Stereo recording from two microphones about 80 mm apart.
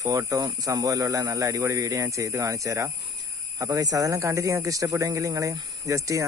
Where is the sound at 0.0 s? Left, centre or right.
Right.